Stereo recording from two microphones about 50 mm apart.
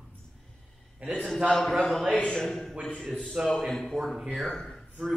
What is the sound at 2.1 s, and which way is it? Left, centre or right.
Speech, centre.